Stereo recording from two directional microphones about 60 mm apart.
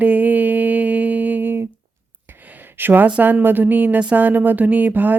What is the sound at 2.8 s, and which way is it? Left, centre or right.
Speech, right.